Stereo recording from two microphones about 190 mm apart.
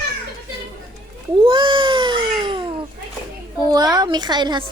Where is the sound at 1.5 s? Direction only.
25° right (ahead or behind).